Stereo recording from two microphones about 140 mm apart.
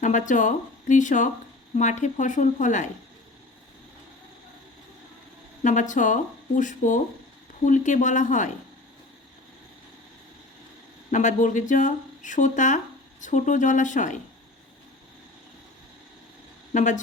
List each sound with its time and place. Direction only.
0.0 s speech: 60° left (ahead or behind)
5.6 s speech: 60° left (ahead or behind)
11.1 s speech: 60° left (ahead or behind)
16.7 s speech: 60° left (ahead or behind)